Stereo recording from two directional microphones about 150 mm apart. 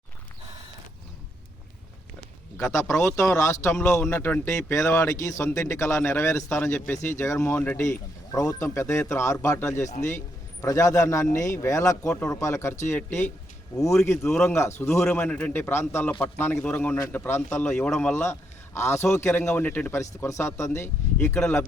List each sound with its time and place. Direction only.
2.6 s a man's voice: 20° left (ahead or behind)